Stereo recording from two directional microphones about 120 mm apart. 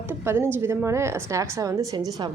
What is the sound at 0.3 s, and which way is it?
A woman's voice, 20° right (ahead or behind).